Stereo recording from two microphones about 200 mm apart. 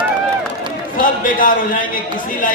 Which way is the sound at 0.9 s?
40° left (ahead or behind).